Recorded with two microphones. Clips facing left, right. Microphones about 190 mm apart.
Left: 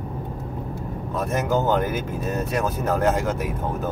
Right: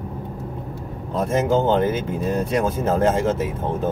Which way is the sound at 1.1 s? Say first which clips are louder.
Right 4 dB; 25° right (ahead or behind).